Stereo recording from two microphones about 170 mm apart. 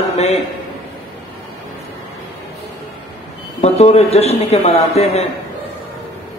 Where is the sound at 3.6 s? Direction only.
40° left (ahead or behind).